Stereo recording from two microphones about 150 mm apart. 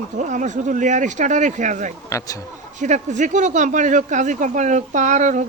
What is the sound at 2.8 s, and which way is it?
Speech, 55° right (ahead or behind).